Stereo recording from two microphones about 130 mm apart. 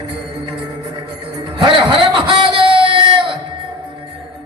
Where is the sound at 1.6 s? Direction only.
40° right (ahead or behind).